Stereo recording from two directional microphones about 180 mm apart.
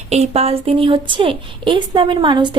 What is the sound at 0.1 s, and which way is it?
A woman's voice, 35° right (ahead or behind).